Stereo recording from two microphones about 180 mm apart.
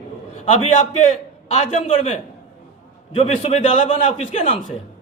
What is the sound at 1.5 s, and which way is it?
Speech, 35° left (ahead or behind).